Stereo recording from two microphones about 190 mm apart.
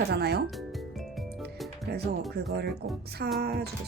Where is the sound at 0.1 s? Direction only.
55° right (ahead or behind).